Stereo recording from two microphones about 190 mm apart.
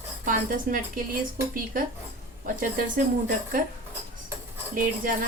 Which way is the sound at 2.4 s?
45° right (ahead or behind).